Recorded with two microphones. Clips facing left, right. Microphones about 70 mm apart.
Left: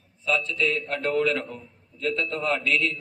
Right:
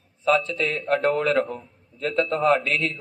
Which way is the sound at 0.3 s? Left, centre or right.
Right.